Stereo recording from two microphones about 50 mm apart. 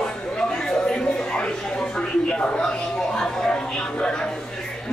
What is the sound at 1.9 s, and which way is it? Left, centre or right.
Speech, centre.